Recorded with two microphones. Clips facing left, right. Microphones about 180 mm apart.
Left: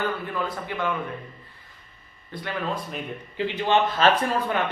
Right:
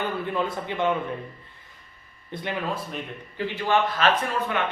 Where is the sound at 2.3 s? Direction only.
20° right (ahead or behind).